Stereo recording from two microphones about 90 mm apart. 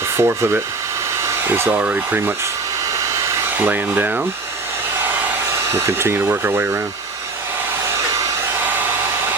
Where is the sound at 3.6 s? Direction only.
20° right (ahead or behind).